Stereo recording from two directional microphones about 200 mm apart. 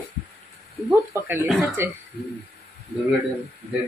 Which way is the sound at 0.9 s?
10° right (ahead or behind).